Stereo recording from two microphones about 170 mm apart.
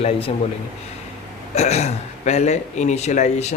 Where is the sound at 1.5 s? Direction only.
40° left (ahead or behind).